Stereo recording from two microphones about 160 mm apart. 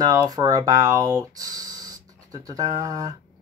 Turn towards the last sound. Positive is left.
turn(degrees=-25)  # may be behind; listen again after turning